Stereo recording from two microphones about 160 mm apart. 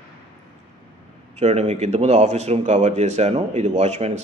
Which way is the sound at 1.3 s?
45° right (ahead or behind).